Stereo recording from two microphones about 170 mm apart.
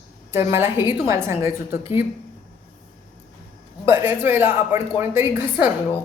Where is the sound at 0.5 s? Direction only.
15° right (ahead or behind).